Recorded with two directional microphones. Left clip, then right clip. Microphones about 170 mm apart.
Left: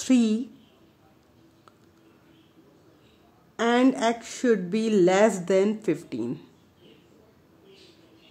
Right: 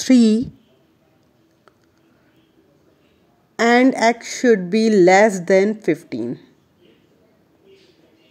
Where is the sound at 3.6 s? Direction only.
35° right (ahead or behind).